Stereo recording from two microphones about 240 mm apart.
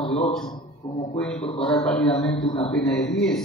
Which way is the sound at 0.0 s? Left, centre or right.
Left.